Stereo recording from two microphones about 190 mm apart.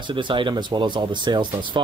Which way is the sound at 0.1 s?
25° right (ahead or behind).